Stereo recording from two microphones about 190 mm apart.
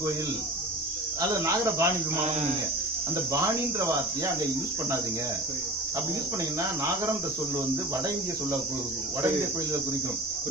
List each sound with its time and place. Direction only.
1.3 s speech: 15° right (ahead or behind)